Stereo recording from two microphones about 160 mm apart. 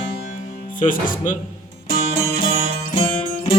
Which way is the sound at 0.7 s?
55° left (ahead or behind).